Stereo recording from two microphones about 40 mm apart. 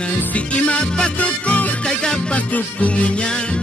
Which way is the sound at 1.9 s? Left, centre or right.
Centre.